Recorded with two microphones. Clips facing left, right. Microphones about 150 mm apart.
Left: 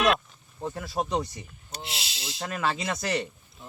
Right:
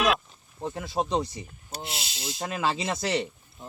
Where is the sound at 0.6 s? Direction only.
20° right (ahead or behind).